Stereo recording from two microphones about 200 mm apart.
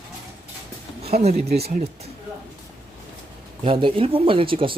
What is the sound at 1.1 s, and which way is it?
Speech, 35° right (ahead or behind).